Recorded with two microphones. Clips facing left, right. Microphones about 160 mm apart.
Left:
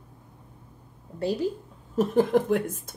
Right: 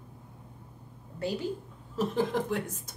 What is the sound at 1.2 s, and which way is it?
Speech, 35° left (ahead or behind).